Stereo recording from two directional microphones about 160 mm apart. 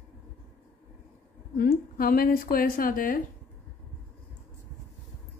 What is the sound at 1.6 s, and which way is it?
Speech, 65° left (ahead or behind).